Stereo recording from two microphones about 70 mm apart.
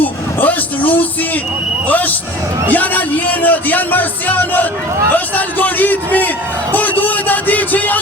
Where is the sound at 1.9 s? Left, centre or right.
Left.